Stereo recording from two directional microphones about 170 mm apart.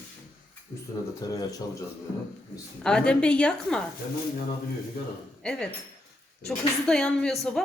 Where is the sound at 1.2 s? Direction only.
20° left (ahead or behind).